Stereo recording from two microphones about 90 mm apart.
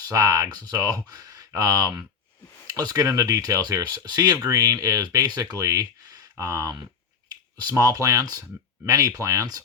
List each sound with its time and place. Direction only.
0.1 s speech: 40° right (ahead or behind)
3.9 s speech: 50° right (ahead or behind)